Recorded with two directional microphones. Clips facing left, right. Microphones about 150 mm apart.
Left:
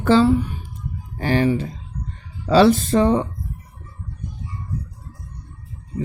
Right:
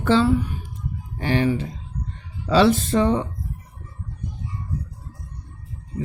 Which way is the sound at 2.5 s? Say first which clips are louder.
Left 3 dB; 40° left (ahead or behind).